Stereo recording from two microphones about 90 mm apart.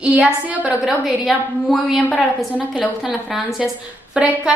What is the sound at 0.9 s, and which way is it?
A woman's voice, centre (ahead or behind).